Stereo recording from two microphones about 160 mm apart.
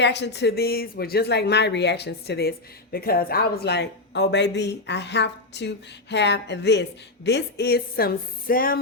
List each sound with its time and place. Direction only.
0.0 s a woman's voice: 90° left; by 8.8 s 65° left (ahead or behind)